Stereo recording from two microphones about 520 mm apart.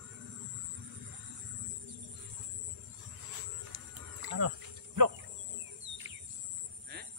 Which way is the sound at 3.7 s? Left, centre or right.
Right.